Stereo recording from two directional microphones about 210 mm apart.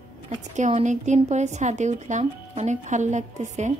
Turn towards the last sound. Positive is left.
turn(degrees=-35)  # may be behind; listen again after turning